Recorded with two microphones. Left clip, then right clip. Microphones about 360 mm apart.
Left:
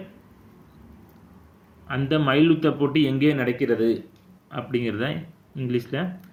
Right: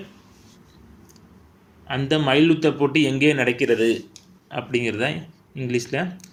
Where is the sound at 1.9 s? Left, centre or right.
Centre.